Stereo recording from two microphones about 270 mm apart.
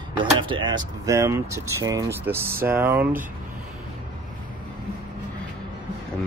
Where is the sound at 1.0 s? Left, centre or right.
Centre.